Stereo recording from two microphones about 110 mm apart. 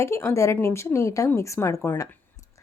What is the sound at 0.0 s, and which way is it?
A woman's voice, 25° left (ahead or behind).